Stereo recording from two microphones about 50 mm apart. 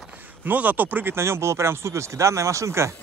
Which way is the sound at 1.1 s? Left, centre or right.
Right.